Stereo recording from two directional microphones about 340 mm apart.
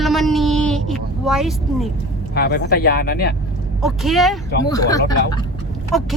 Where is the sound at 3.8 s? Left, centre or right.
Centre.